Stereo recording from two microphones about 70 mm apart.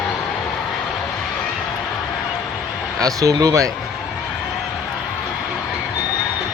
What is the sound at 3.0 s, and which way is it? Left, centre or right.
Speech, right.